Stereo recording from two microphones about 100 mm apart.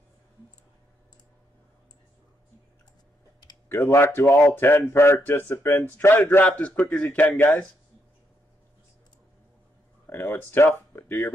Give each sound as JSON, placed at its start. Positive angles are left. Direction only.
{"t": 3.6, "sound": "a man's voice", "side_deg": 25}
{"t": 10.0, "sound": "speech", "side_deg": 25}